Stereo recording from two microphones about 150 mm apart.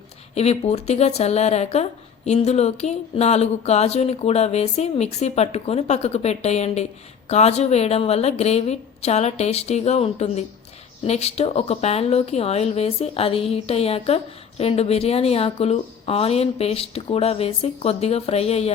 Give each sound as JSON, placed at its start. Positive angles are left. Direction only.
{"t": 0.3, "sound": "speech", "side_deg": 45}